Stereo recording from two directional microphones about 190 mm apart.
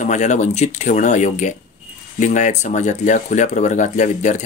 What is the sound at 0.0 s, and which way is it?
Speech, 40° left (ahead or behind).